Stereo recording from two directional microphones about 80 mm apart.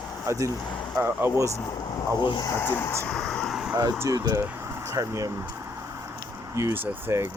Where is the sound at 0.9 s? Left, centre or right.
Right.